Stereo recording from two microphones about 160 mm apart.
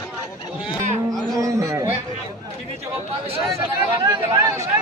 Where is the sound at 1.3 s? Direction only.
20° right (ahead or behind).